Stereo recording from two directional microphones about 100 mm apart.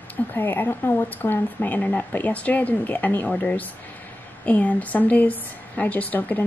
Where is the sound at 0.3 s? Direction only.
20° left (ahead or behind).